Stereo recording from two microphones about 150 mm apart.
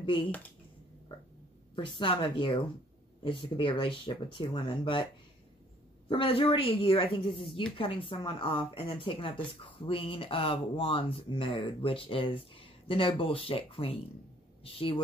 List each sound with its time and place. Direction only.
0.0 s speech: 35° left (ahead or behind)
1.8 s a woman's voice: 35° left (ahead or behind)
6.0 s a woman's voice: 35° left (ahead or behind)